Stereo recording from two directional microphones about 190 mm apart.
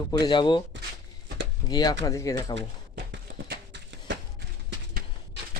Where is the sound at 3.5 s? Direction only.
65° right (ahead or behind).